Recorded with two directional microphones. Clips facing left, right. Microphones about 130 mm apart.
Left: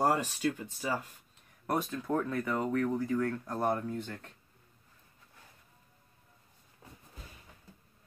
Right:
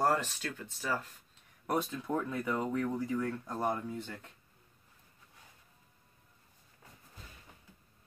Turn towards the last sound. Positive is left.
turn(degrees=25)  # may be behind; listen again after turning